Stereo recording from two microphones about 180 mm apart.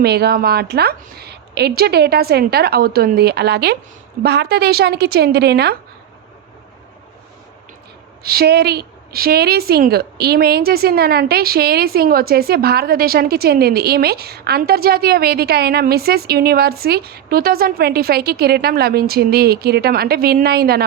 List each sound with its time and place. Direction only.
0.0 s a woman's voice: 60° right (ahead or behind)
8.2 s a woman's voice: 60° right (ahead or behind)